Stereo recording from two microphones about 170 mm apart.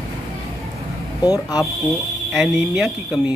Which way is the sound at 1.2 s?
20° left (ahead or behind).